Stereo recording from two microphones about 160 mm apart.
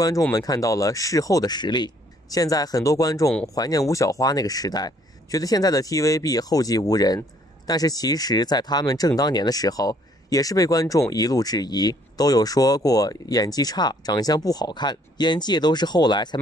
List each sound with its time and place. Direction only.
0.3 s speech: 20° left (ahead or behind)